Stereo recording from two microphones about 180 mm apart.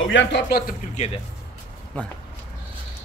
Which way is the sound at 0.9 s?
35° left (ahead or behind).